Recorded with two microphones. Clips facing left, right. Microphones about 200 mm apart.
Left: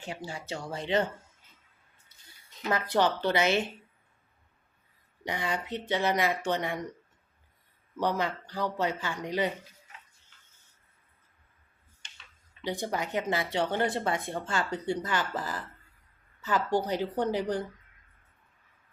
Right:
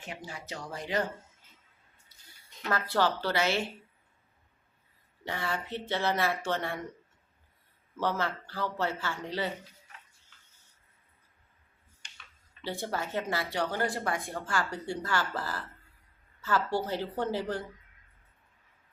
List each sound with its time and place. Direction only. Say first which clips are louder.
0.0 s speech: left 4 dB; 30° left (ahead or behind)
2.6 s speech: left 2 dB; 20° left (ahead or behind)
5.2 s speech: left 2 dB; 15° left (ahead or behind)
7.9 s speech: left 2 dB; 15° left (ahead or behind)
12.6 s speech: left 2 dB; 15° left (ahead or behind)